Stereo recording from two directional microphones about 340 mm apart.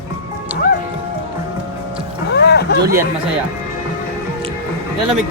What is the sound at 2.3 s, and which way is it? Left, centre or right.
Vehicle, left.